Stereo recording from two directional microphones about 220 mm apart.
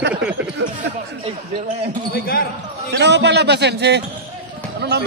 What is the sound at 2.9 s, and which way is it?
A man's voice, 50° right (ahead or behind).